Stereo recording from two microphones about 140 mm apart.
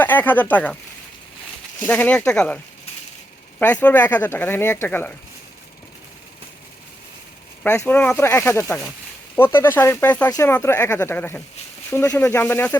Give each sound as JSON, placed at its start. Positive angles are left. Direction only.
{"t": 0.0, "sound": "speech", "side_deg": 15}
{"t": 1.9, "sound": "speech", "side_deg": 10}
{"t": 3.6, "sound": "speech", "side_deg": 10}
{"t": 7.6, "sound": "speech", "side_deg": 15}